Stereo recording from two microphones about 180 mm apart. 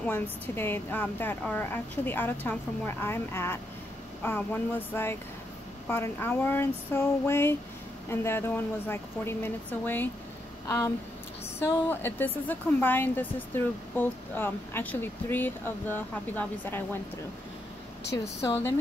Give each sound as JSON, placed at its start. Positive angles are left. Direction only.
{"t": 0.0, "sound": "a woman's voice", "side_deg": 10}
{"t": 11.6, "sound": "a woman's voice", "side_deg": 10}
{"t": 18.2, "sound": "a woman's voice", "side_deg": 15}